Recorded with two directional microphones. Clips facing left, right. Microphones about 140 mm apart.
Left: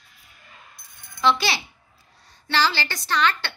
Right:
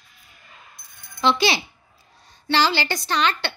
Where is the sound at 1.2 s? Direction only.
20° right (ahead or behind).